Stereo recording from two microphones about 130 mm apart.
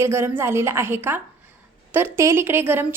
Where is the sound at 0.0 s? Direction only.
20° right (ahead or behind).